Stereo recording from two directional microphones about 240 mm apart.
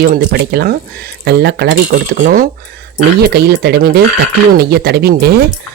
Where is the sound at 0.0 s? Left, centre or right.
Right.